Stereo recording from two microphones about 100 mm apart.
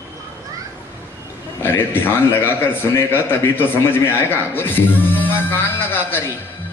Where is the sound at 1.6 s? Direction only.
20° left (ahead or behind).